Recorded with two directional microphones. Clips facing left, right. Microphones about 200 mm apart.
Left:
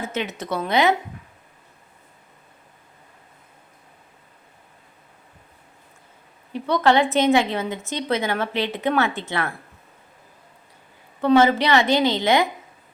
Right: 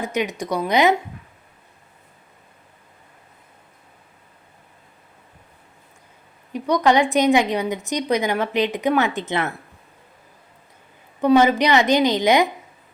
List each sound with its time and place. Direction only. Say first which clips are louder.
0.0 s a woman's voice: right 4 dB; 15° right (ahead or behind)
6.5 s a woman's voice: right 1 dB; 15° right (ahead or behind)
11.2 s a woman's voice: right 1 dB; 15° right (ahead or behind)